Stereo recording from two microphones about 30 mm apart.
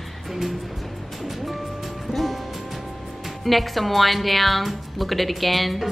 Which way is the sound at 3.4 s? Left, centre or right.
Centre.